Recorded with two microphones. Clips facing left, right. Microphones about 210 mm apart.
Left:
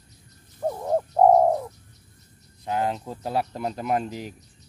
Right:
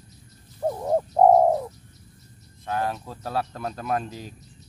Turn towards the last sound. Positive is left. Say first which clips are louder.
# left 2 dB
turn(degrees=15)  # may be behind; listen again after turning